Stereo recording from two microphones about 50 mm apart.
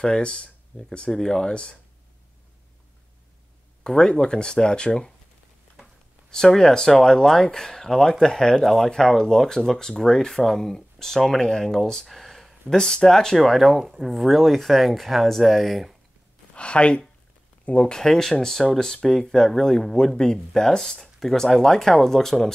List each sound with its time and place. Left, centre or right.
0.0 s speech: centre
3.8 s speech: centre
6.3 s speech: centre
13.4 s speech: centre
16.5 s speech: left
17.9 s speech: centre